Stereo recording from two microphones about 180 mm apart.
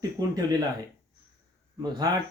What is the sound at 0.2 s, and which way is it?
Speech, 20° right (ahead or behind).